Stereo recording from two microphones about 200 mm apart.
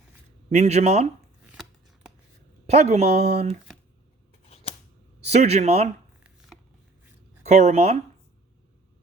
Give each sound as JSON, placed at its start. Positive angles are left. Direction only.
{"t": 0.5, "sound": "speech", "side_deg": -35}
{"t": 2.6, "sound": "speech", "side_deg": -35}
{"t": 4.4, "sound": "a sound", "side_deg": 30}
{"t": 5.3, "sound": "speech", "side_deg": -35}
{"t": 7.4, "sound": "speech", "side_deg": -35}